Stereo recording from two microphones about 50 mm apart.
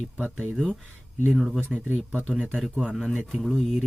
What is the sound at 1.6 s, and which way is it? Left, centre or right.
Speech, left.